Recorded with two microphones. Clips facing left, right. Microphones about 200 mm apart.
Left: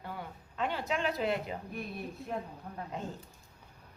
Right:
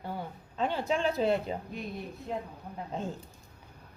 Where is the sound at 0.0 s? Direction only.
30° right (ahead or behind).